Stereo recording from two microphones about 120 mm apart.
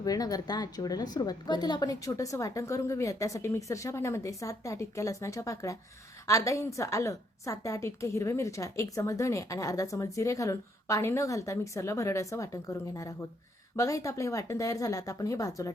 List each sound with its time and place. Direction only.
0.0 s a woman's voice: 30° left (ahead or behind)